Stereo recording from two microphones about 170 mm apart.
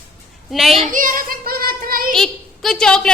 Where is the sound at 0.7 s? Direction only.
45° right (ahead or behind).